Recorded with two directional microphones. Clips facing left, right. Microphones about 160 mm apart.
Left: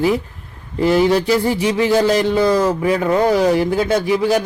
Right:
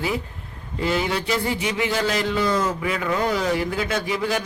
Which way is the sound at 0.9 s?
40° left (ahead or behind).